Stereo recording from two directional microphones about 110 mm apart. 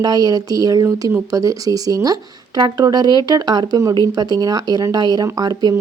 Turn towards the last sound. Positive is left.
turn(degrees=-35)  # may be behind; listen again after turning